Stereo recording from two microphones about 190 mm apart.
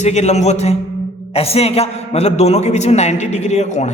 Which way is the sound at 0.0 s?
35° left (ahead or behind).